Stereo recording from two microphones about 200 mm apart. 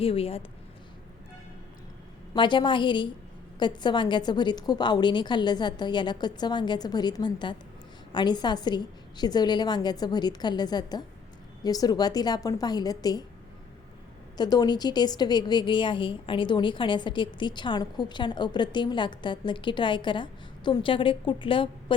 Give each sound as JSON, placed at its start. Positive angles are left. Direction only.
{"t": 0.0, "sound": "a woman's voice", "side_deg": 30}
{"t": 2.3, "sound": "a woman's voice", "side_deg": 25}
{"t": 14.3, "sound": "a woman's voice", "side_deg": 20}